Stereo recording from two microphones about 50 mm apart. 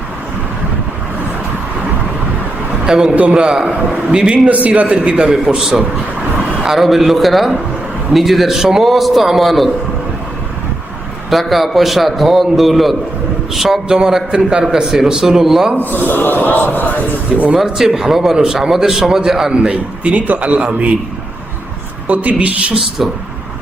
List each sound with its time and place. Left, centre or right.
2.8 s a man's voice: centre
4.4 s a man's voice: right
5.5 s a man's voice: centre
11.3 s a man's voice: centre
15.8 s a man's voice: left
17.6 s a man's voice: centre
19.5 s a man's voice: right
22.0 s a man's voice: right